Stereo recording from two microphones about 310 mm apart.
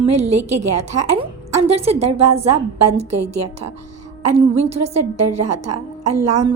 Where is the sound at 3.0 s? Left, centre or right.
Right.